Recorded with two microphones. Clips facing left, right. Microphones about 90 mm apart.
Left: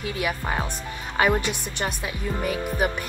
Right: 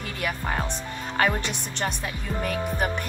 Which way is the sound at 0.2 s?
5° left (ahead or behind).